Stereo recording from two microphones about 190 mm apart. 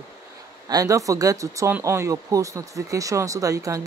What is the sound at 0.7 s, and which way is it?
Speech, 20° right (ahead or behind).